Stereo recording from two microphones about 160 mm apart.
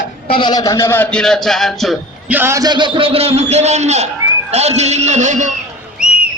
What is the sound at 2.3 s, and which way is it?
A man's voice, 10° right (ahead or behind).